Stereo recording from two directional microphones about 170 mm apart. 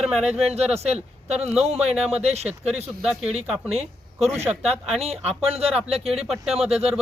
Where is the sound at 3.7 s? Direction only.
40° right (ahead or behind).